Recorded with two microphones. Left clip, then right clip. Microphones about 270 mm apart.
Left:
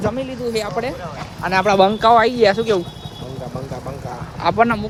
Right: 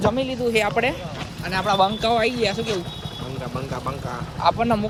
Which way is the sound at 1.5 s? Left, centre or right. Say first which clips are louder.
Left 6 dB; left.